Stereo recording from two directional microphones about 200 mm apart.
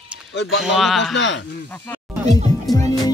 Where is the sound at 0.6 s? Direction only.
Centre (ahead or behind).